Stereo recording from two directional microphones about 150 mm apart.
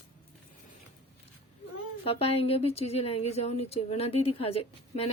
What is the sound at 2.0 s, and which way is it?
Speech, 40° left (ahead or behind).